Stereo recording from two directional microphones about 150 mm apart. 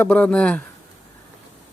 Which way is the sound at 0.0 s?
10° left (ahead or behind).